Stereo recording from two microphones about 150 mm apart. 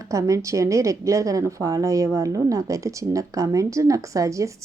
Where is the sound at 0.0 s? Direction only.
20° right (ahead or behind).